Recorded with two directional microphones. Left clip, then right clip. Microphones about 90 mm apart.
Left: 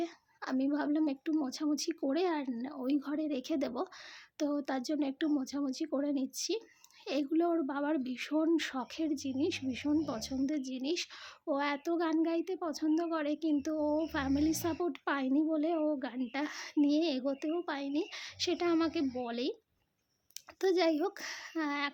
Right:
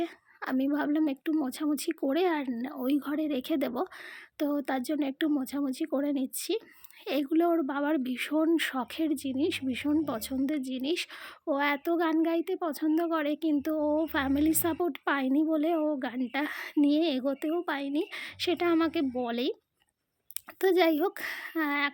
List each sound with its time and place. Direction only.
0.5 s speech: 35° right (ahead or behind)
20.6 s speech: 40° right (ahead or behind)